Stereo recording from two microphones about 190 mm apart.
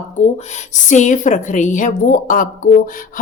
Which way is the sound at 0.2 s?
35° left (ahead or behind).